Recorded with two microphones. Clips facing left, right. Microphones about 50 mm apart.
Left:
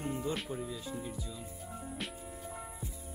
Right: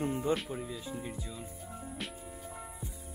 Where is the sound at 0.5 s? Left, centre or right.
Centre.